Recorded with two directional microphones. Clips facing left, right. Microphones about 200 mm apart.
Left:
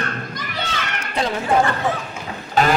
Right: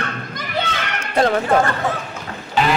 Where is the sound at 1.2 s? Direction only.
60° right (ahead or behind).